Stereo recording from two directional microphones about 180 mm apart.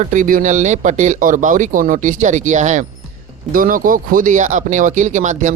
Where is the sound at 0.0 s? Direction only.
45° right (ahead or behind).